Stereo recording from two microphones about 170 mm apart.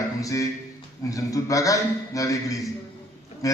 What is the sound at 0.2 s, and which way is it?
A man's voice, 20° left (ahead or behind).